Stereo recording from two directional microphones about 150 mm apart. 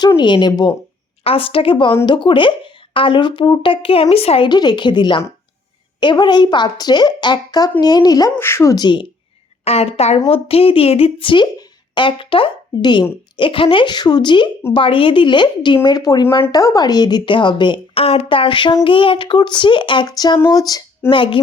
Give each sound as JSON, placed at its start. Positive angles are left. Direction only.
{"t": 0.2, "sound": "a woman's voice", "side_deg": 30}
{"t": 9.6, "sound": "a woman's voice", "side_deg": 45}
{"t": 21.1, "sound": "speech", "side_deg": 35}